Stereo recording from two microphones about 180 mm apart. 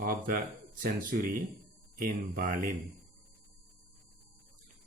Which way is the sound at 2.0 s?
50° right (ahead or behind).